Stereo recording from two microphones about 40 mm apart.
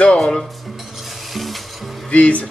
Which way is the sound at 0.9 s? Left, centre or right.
Centre.